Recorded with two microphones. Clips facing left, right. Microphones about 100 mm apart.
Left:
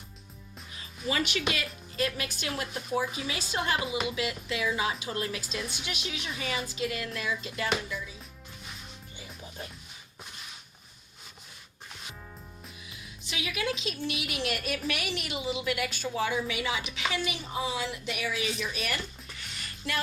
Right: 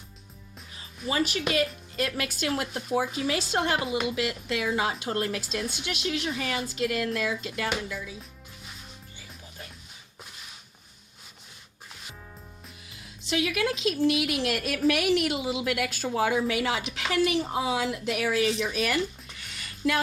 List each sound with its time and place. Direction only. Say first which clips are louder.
1.0 s speech: right 2 dB; 35° right (ahead or behind)
2.0 s speech: right 2 dB; 70° right (ahead or behind)
4.1 s speech: right 3 dB; 65° right (ahead or behind)
5.7 s a woman's voice: right 4 dB; 90° right
6.1 s speech: right 6 dB; 70° right (ahead or behind); by 8.1 s 90° right
13.2 s a woman's voice: right 6 dB; 70° right (ahead or behind); by 18.9 s 90° right